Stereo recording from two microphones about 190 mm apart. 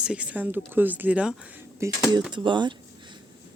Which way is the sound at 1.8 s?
20° right (ahead or behind).